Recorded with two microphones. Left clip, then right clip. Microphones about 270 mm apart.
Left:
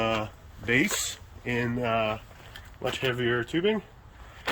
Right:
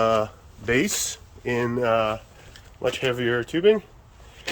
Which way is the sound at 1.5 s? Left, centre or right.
Centre.